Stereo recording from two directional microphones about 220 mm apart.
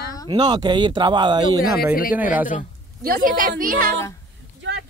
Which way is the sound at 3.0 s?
40° right (ahead or behind).